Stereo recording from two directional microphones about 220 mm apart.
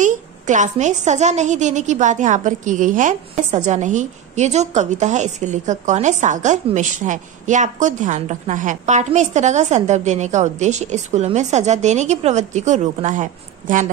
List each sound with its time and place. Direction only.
0.0 s a woman's voice: 35° right (ahead or behind)